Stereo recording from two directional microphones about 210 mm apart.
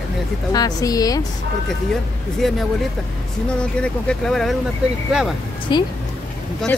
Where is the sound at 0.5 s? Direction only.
15° left (ahead or behind).